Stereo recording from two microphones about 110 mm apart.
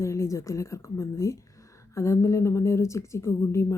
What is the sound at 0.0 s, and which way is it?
Speech, 25° left (ahead or behind).